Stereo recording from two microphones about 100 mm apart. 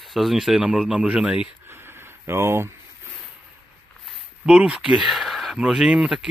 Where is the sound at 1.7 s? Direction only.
25° right (ahead or behind).